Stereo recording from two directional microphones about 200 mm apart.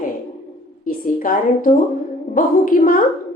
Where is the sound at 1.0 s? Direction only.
45° left (ahead or behind).